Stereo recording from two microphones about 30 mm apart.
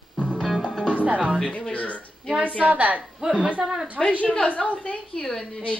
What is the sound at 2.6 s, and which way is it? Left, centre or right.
Speech, right.